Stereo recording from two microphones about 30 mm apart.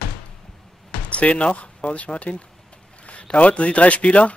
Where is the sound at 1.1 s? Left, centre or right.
Left.